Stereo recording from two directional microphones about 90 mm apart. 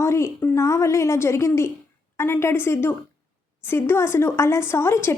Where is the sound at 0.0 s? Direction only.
30° left (ahead or behind).